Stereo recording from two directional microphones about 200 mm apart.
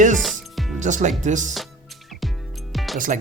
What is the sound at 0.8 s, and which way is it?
Speech, 40° right (ahead or behind).